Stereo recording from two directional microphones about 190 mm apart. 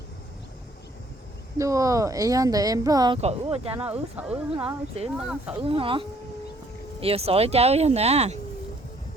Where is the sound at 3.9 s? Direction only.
5° right (ahead or behind).